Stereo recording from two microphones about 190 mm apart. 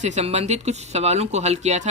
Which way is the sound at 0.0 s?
35° right (ahead or behind).